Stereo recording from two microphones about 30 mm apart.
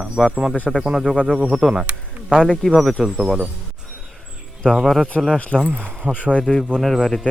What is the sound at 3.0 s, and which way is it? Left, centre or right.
Speech, centre.